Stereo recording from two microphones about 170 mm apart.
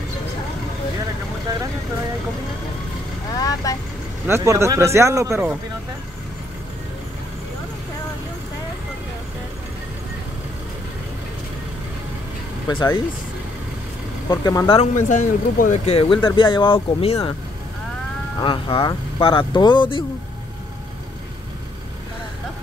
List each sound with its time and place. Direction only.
3.3 s speech: 20° left (ahead or behind)
4.3 s speech: 15° right (ahead or behind)
12.6 s speech: 25° left (ahead or behind)
14.3 s speech: 20° left (ahead or behind)
15.0 s speech: 45° left (ahead or behind)
15.8 s speech: 35° left (ahead or behind)
18.4 s speech: 30° left (ahead or behind)